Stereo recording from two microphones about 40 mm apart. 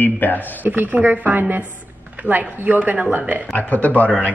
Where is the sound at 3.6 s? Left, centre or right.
Left.